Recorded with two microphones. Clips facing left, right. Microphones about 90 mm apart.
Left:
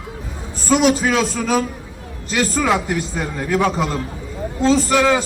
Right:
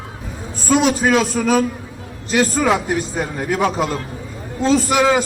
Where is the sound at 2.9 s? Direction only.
20° right (ahead or behind).